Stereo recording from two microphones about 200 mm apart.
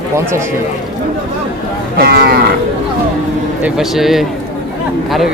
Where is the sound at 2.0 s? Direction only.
50° right (ahead or behind).